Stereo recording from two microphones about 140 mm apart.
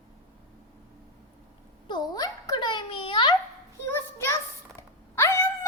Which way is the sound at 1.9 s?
25° left (ahead or behind).